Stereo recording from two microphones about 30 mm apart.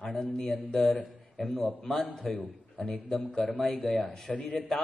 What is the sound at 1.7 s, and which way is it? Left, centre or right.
Speech, centre.